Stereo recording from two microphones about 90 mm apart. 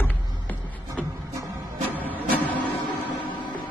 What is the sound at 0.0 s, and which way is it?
Music, 20° left (ahead or behind).